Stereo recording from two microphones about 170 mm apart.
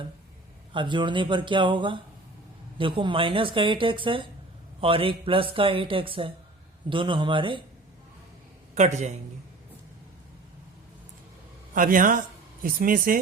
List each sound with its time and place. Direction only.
0.7 s speech: 30° right (ahead or behind)
8.7 s a man's voice: 45° right (ahead or behind)
11.7 s speech: 55° right (ahead or behind)